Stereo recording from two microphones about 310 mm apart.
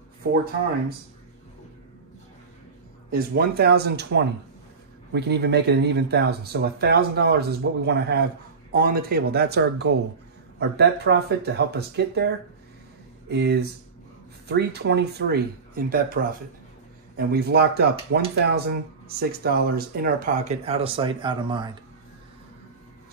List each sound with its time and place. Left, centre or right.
3.1 s speech: right
13.3 s speech: right; by 21.7 s centre